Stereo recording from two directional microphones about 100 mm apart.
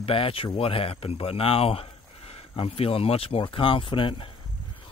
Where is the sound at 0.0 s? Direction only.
65° left (ahead or behind).